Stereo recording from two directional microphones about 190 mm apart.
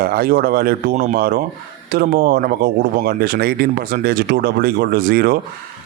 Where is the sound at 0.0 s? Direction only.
50° right (ahead or behind).